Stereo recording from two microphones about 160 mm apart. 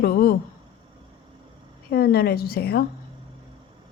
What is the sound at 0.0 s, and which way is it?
Speech, 75° left (ahead or behind).